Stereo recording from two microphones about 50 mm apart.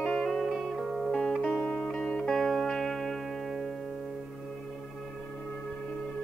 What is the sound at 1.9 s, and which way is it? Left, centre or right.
Music, centre.